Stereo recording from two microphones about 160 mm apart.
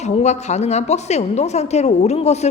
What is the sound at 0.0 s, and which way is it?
A woman's voice, 45° left (ahead or behind).